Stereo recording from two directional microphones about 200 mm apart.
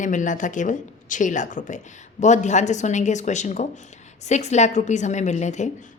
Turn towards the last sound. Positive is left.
turn(degrees=35)  # may be behind; listen again after turning